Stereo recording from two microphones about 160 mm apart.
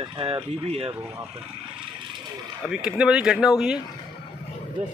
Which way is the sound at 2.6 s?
5° right (ahead or behind).